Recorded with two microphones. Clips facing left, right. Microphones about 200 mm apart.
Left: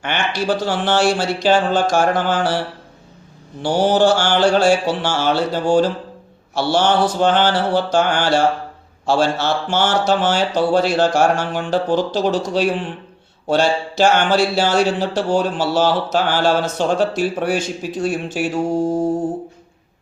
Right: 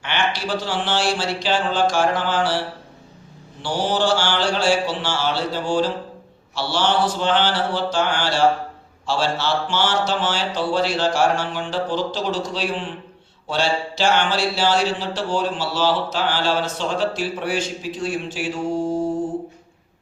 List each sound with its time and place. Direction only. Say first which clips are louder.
0.0 s speech: left 3 dB; 45° left (ahead or behind)
3.6 s speech: left 7 dB; 45° left (ahead or behind)